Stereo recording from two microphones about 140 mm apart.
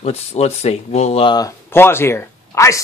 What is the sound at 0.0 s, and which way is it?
Speech, 50° left (ahead or behind).